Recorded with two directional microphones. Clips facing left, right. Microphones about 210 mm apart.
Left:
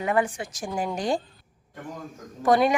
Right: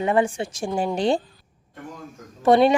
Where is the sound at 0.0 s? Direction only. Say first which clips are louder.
Right 4 dB; 25° right (ahead or behind).